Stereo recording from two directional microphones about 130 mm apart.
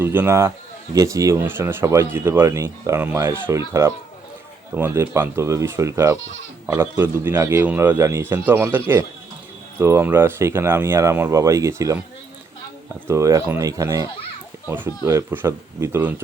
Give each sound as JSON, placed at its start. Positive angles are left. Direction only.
{"t": 0.0, "sound": "speech", "side_deg": -20}
{"t": 9.8, "sound": "speech", "side_deg": -20}
{"t": 13.1, "sound": "speech", "side_deg": -25}